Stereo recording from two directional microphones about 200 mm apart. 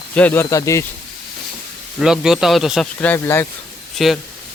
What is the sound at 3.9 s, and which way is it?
Speech, centre (ahead or behind).